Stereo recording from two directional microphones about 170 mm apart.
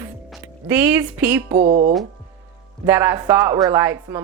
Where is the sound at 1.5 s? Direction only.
50° right (ahead or behind).